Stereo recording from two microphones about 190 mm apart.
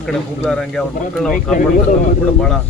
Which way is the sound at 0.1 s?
5° left (ahead or behind).